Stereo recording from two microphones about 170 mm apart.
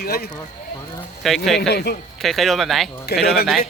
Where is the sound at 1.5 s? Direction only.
80° left.